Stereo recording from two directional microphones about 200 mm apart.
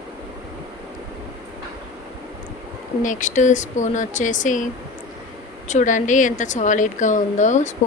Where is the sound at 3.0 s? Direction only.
40° left (ahead or behind).